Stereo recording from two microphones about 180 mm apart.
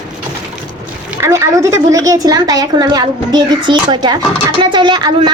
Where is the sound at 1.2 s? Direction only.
15° right (ahead or behind).